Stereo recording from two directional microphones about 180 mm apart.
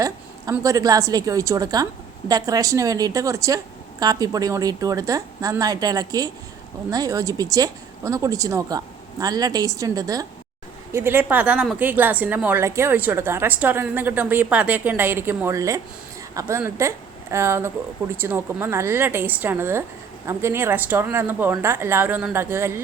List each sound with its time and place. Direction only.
0.0 s a woman's voice: 20° right (ahead or behind)